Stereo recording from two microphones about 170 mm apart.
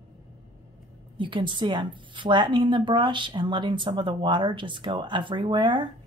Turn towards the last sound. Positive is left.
turn(degrees=-30)  # may be behind; listen again after turning